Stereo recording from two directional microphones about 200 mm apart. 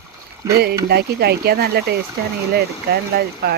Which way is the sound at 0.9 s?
55° right (ahead or behind).